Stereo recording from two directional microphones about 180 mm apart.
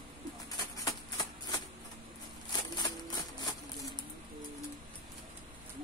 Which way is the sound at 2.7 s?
20° left (ahead or behind).